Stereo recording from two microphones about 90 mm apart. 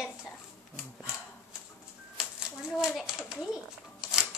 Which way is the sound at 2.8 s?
5° right (ahead or behind).